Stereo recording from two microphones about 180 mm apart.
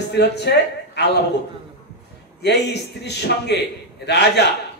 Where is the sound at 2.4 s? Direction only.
70° left (ahead or behind).